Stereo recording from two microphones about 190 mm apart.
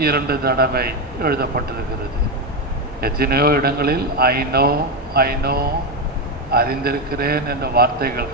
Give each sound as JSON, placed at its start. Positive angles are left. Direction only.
{"t": 0.0, "sound": "a man's voice", "side_deg": -55}
{"t": 3.0, "sound": "a man's voice", "side_deg": -55}